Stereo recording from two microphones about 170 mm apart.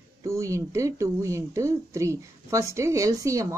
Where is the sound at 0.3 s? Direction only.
15° right (ahead or behind).